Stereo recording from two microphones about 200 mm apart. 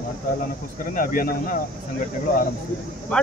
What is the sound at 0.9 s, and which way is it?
Speech, 45° left (ahead or behind).